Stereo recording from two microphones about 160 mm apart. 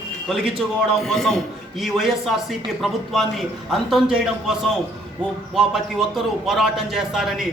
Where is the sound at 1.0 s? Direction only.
Centre (ahead or behind).